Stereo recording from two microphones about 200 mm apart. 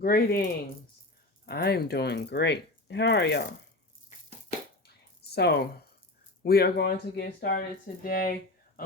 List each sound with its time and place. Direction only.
0.0 s speech: 50° left (ahead or behind)
1.5 s speech: 55° left (ahead or behind)
5.3 s speech: 55° left (ahead or behind)